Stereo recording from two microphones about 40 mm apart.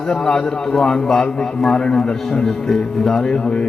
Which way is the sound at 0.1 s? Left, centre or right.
Centre.